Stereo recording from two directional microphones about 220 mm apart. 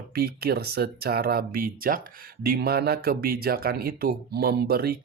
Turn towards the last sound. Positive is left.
turn(degrees=-45)  # may be behind; listen again after turning